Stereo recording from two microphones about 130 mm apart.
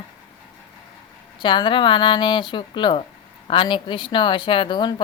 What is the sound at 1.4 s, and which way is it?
A woman's voice, 40° left (ahead or behind).